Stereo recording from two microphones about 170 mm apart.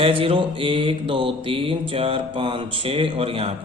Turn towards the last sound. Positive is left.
turn(degrees=-35)  # may be behind; listen again after turning